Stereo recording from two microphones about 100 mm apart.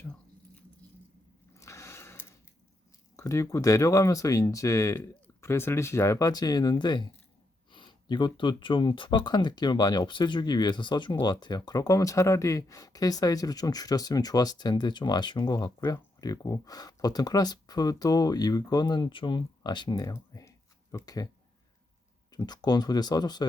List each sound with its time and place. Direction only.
1.5 s a sound: 30° left (ahead or behind)
3.2 s speech: 30° left (ahead or behind)
22.3 s speech: 40° left (ahead or behind)